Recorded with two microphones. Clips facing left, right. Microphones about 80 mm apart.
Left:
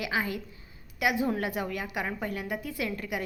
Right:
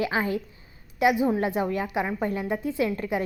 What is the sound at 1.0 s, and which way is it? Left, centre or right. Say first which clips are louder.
Speech: right 6 dB; right.